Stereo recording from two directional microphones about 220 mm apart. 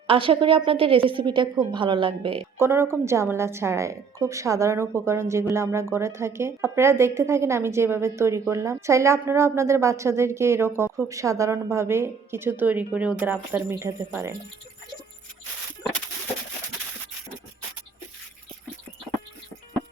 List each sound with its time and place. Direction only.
0.1 s a woman's voice: 25° right (ahead or behind)
2.6 s a woman's voice: 10° right (ahead or behind)